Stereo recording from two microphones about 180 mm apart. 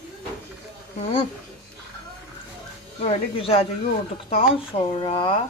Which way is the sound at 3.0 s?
30° left (ahead or behind).